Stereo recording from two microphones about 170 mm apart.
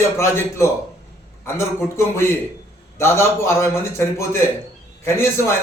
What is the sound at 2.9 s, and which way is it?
Speech, 15° left (ahead or behind).